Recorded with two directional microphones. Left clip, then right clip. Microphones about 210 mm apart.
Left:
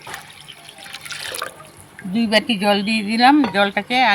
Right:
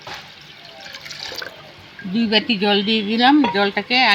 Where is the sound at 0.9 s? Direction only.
35° left (ahead or behind).